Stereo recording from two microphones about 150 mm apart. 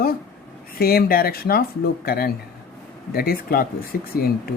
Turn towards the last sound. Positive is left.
turn(degrees=85)